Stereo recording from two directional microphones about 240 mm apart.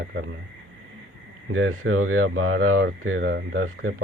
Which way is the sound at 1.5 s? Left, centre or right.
Right.